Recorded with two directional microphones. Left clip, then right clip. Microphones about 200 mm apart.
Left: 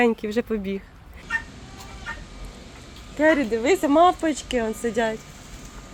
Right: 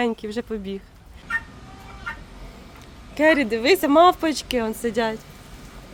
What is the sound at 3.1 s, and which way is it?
Speech, 35° right (ahead or behind).